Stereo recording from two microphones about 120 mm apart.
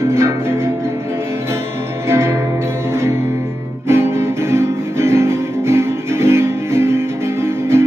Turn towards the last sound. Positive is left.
turn(degrees=-20)  # may be behind; listen again after turning